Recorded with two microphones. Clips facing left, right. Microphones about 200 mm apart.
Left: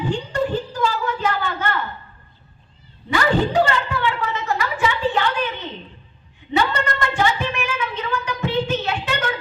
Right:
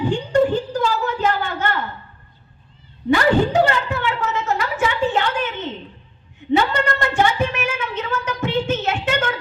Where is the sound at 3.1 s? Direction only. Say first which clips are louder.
Right 3 dB; 50° right (ahead or behind).